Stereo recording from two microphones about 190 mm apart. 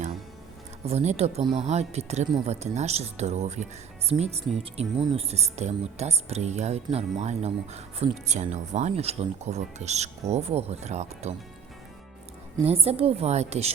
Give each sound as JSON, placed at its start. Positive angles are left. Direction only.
{"t": 0.9, "sound": "speech", "side_deg": -35}
{"t": 12.6, "sound": "speech", "side_deg": -30}